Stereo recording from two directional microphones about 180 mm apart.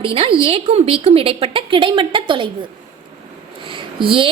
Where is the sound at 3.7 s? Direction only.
30° right (ahead or behind).